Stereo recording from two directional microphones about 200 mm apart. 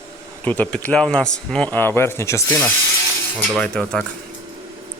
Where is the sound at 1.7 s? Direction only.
10° left (ahead or behind).